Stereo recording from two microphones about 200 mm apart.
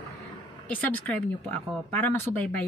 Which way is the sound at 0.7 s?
10° left (ahead or behind).